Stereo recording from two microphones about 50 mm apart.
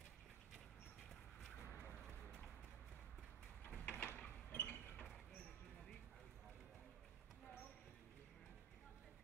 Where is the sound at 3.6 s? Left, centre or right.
Left.